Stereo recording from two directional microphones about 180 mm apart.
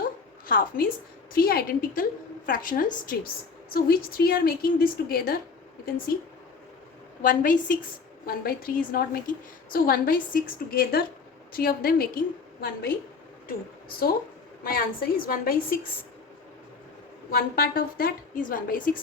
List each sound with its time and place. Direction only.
0.4 s a woman's voice: 50° left (ahead or behind)
7.2 s a woman's voice: 50° left (ahead or behind)
14.6 s a woman's voice: 55° left (ahead or behind)
17.3 s a woman's voice: 55° left (ahead or behind)